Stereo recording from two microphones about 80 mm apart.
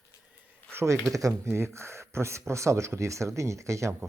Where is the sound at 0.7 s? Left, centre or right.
Right.